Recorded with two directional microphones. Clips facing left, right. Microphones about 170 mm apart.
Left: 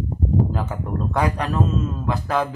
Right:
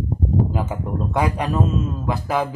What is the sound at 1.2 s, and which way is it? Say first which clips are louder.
Speech: right 1 dB; 10° right (ahead or behind).